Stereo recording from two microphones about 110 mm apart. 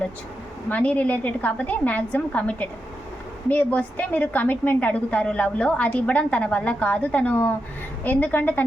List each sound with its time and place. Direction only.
0.7 s a woman's voice: 10° left (ahead or behind)